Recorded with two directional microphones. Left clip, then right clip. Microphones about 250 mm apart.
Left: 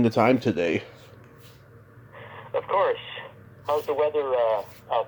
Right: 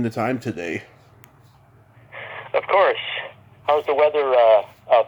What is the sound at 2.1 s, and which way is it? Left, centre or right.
Radio, right.